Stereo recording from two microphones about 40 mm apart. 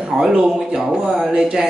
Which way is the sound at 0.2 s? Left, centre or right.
Right.